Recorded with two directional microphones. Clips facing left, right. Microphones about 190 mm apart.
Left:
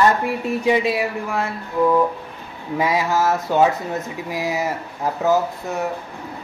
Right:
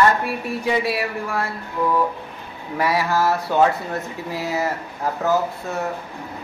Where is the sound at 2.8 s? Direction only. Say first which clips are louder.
Even; 20° left (ahead or behind).